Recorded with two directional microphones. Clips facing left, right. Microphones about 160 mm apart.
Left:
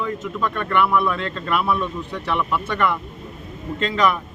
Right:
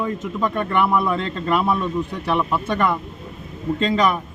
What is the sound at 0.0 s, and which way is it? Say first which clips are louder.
Speech: right 1 dB; 15° right (ahead or behind).